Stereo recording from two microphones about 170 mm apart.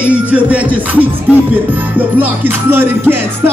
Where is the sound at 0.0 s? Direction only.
10° right (ahead or behind).